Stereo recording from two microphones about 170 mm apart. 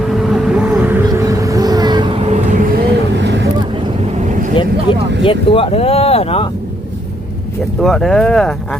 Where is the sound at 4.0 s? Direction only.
45° right (ahead or behind).